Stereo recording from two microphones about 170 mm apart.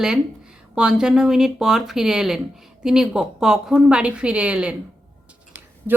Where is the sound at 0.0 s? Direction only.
5° right (ahead or behind).